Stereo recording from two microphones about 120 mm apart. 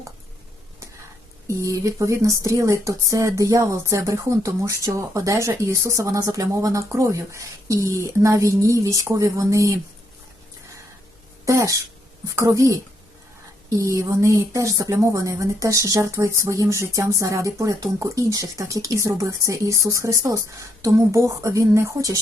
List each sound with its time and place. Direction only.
1.5 s speech: 25° right (ahead or behind)
11.4 s speech: 25° right (ahead or behind)